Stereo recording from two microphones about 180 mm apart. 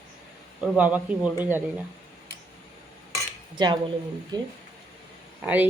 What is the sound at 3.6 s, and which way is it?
Speech, 25° right (ahead or behind).